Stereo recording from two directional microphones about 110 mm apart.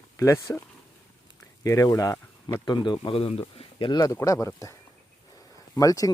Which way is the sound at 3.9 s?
30° left (ahead or behind).